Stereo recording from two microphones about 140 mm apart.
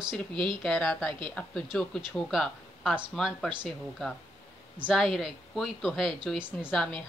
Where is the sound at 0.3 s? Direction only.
35° right (ahead or behind).